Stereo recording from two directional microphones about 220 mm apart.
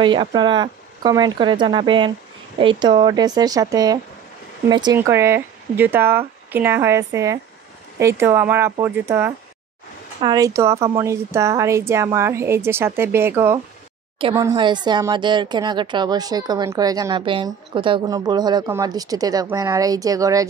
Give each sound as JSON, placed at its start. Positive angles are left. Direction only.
{"t": 0.0, "sound": "speech", "side_deg": -20}
{"t": 14.1, "sound": "speech", "side_deg": -20}